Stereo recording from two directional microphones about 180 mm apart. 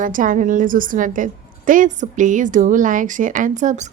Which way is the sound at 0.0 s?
50° right (ahead or behind).